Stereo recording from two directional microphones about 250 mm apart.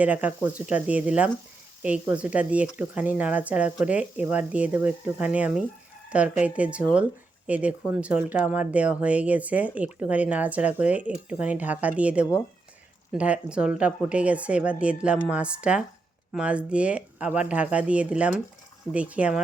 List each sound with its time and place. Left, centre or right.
0.0 s speech: centre